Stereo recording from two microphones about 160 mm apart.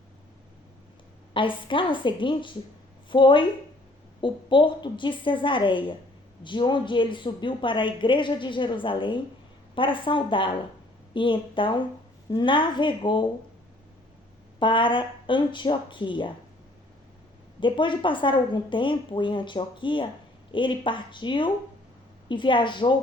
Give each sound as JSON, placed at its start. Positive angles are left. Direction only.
{"t": 1.3, "sound": "a woman's voice", "side_deg": 30}
{"t": 14.6, "sound": "speech", "side_deg": 30}
{"t": 17.6, "sound": "a woman's voice", "side_deg": 30}